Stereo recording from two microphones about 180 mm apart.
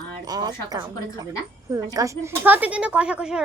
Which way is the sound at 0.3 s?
20° right (ahead or behind).